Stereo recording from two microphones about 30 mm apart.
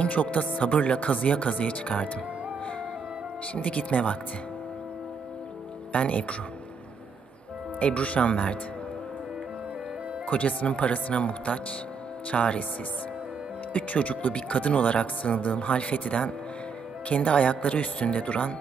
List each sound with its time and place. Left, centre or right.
0.1 s speech: left
3.6 s speech: left
5.9 s speech: left
7.8 s speech: left
10.2 s speech: left
13.7 s speech: left